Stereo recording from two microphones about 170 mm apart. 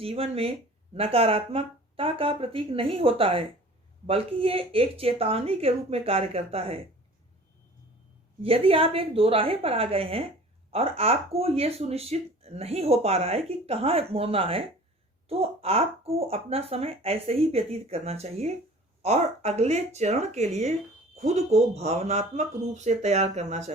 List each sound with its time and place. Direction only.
0.0 s speech: 35° right (ahead or behind)
8.4 s speech: 35° right (ahead or behind)